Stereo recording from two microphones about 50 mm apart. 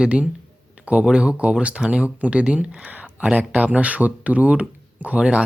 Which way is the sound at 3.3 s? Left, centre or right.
Right.